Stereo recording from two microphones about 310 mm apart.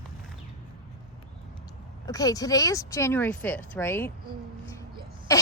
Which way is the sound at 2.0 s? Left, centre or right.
Centre.